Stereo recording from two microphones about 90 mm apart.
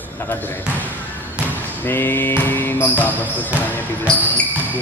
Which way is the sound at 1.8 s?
25° left (ahead or behind).